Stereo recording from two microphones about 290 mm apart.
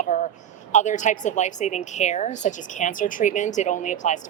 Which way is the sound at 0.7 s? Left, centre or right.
Left.